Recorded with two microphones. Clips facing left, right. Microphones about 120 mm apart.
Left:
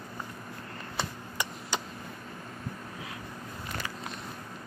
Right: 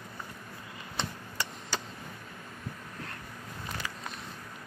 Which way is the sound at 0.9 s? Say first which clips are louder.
Left 1 dB; 15° left (ahead or behind).